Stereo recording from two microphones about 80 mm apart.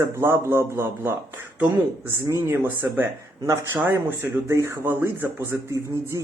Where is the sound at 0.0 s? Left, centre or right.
Right.